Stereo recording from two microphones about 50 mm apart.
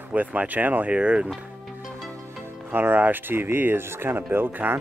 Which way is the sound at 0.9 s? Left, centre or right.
Right.